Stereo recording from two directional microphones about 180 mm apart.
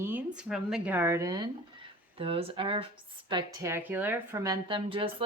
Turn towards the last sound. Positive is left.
turn(degrees=-30)  # may be behind; listen again after turning